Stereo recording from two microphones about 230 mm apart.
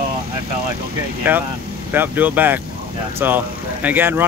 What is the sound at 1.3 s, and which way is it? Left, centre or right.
Speech, centre.